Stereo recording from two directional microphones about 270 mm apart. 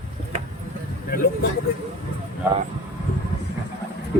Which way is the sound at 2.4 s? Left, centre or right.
Centre.